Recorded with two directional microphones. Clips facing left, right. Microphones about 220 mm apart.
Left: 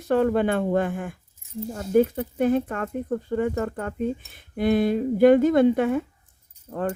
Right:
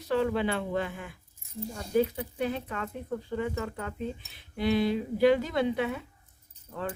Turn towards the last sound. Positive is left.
turn(degrees=45)  # may be behind; listen again after turning